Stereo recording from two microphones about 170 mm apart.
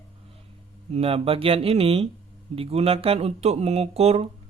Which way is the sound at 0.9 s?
35° right (ahead or behind).